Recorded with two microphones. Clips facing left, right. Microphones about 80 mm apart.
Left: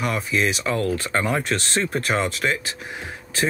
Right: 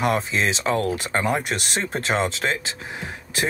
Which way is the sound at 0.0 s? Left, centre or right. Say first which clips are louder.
Right 1 dB; right.